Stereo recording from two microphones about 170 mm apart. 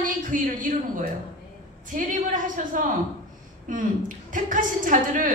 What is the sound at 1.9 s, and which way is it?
A woman's voice, 50° right (ahead or behind).